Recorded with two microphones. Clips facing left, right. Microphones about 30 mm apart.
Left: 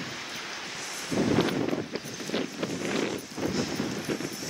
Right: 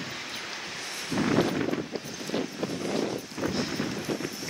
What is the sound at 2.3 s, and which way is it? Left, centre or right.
Wind, centre.